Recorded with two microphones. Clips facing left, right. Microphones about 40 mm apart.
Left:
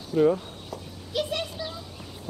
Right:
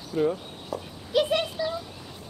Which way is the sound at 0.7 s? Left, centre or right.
Centre.